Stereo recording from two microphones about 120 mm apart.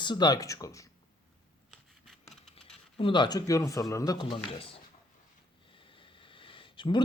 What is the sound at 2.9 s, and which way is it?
Speech, 45° left (ahead or behind).